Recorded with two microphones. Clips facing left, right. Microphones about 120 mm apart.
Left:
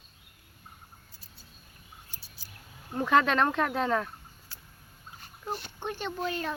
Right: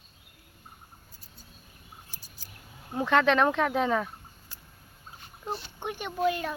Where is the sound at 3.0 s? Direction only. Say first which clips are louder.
Right 1 dB; 5° left (ahead or behind).